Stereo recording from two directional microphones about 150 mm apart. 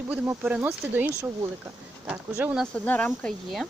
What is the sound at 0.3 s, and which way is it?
Speech, 10° right (ahead or behind).